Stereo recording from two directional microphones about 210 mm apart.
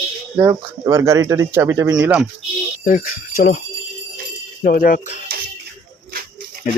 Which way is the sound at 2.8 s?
40° left (ahead or behind).